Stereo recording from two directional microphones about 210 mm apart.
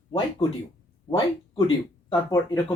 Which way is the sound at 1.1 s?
20° left (ahead or behind).